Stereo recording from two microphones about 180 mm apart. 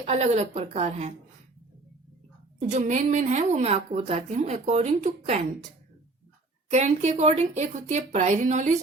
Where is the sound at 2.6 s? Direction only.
40° right (ahead or behind).